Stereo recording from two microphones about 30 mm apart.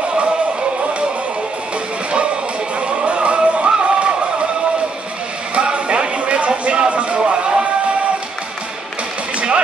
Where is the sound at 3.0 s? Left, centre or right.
Right.